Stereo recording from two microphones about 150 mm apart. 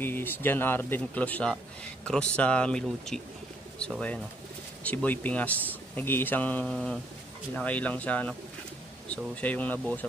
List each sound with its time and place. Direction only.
0.0 s speech: 15° left (ahead or behind)
4.8 s speech: 10° left (ahead or behind)